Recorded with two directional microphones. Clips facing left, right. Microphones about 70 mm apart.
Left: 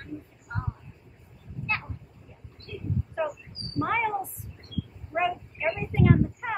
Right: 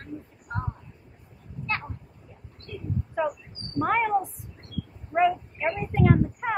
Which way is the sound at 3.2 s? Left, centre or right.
Right.